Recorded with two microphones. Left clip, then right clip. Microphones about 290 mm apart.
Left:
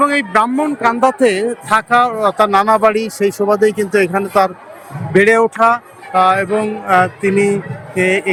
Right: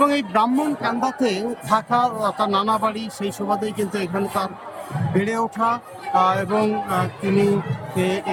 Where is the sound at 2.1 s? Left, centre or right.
Centre.